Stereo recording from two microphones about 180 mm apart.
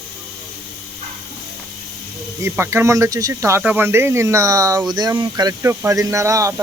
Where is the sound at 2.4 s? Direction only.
15° right (ahead or behind).